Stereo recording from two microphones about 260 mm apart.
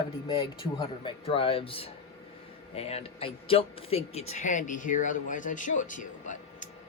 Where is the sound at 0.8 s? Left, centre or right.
Left.